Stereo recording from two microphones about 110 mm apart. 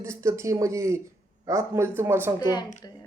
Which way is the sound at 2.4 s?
40° left (ahead or behind).